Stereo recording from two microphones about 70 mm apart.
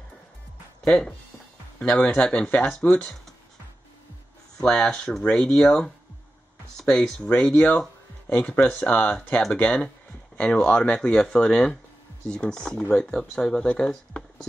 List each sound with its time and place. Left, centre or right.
0.8 s speech: centre
4.6 s speech: centre